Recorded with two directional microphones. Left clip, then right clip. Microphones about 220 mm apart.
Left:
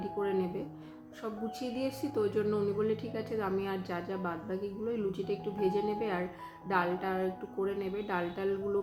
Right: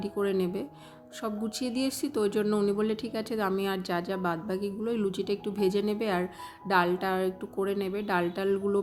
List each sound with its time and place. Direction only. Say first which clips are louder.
0.2 s speech: right 4 dB; 50° right (ahead or behind)